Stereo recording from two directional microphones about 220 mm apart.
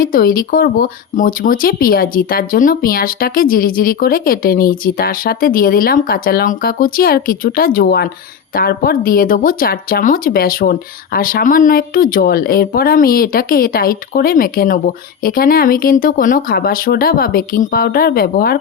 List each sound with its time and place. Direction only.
0.0 s speech: 40° left (ahead or behind)